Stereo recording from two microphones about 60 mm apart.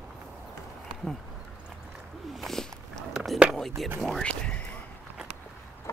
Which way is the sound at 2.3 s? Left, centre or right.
Centre.